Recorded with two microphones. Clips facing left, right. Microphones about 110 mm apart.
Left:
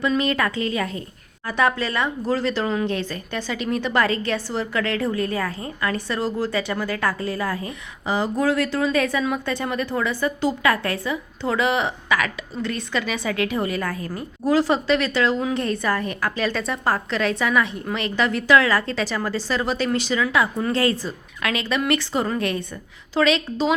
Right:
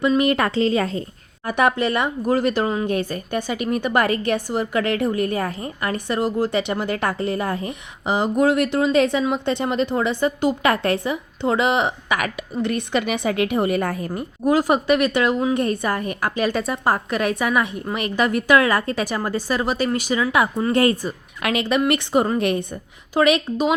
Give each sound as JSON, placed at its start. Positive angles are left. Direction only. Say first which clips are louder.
{"t": 0.2, "sound": "a woman's voice", "louder": "right 4 dB", "side_deg": -20}
{"t": 2.9, "sound": "speech", "louder": "right 4 dB", "side_deg": -50}
{"t": 4.0, "sound": "a woman's voice", "louder": "right 2 dB", "side_deg": -15}